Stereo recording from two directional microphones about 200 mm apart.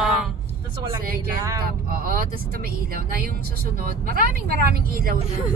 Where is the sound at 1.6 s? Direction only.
45° right (ahead or behind).